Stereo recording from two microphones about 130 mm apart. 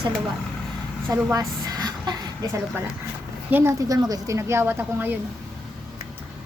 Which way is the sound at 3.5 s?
15° right (ahead or behind).